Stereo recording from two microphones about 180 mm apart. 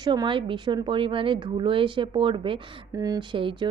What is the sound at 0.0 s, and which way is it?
A woman's voice, 25° right (ahead or behind).